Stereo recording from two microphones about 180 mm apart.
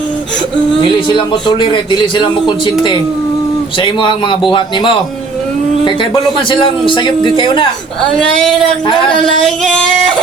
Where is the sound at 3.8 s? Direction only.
25° left (ahead or behind).